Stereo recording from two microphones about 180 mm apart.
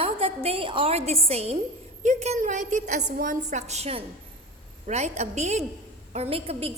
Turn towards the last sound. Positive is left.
turn(degrees=-35)  # may be behind; listen again after turning